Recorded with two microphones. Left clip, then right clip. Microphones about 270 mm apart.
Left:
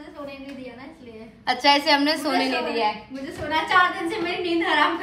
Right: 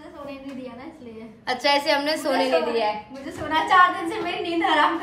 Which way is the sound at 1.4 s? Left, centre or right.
Centre.